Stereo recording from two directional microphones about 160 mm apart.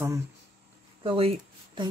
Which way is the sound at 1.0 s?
35° right (ahead or behind).